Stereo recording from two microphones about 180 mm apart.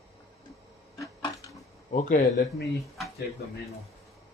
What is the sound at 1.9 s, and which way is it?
Speech, 50° left (ahead or behind).